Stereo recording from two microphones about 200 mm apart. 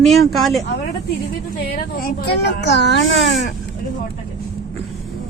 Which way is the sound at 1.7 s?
50° left (ahead or behind).